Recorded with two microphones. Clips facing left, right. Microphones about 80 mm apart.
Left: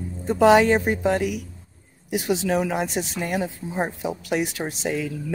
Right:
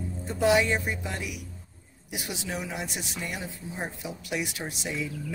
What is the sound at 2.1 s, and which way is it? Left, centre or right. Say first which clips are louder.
Speech: left 13 dB; left.